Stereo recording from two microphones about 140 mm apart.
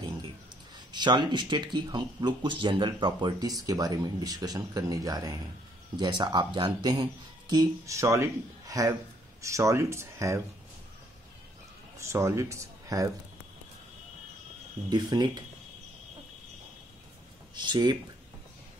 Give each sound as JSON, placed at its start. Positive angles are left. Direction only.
{"t": 0.7, "sound": "speech", "side_deg": -30}
{"t": 12.0, "sound": "speech", "side_deg": -20}
{"t": 14.9, "sound": "speech", "side_deg": -30}
{"t": 17.6, "sound": "speech", "side_deg": -30}